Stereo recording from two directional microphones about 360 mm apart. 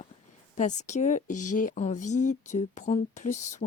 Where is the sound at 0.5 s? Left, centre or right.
Centre.